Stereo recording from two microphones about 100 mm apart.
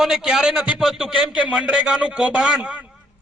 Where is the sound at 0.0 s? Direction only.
5° right (ahead or behind).